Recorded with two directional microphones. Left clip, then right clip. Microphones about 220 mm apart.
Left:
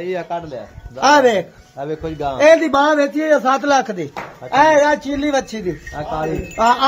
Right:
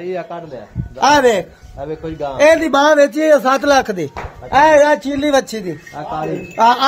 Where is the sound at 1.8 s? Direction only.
45° left (ahead or behind).